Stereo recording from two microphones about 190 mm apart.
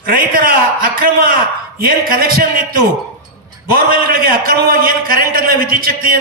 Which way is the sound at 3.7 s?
50° right (ahead or behind).